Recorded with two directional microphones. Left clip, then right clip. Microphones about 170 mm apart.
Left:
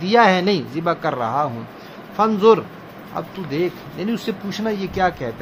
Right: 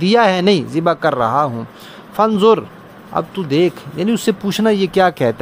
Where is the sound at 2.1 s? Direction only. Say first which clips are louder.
Right 2 dB; 55° right (ahead or behind).